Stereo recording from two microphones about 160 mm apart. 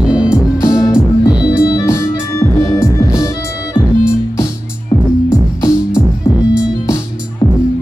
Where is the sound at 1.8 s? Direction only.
20° left (ahead or behind).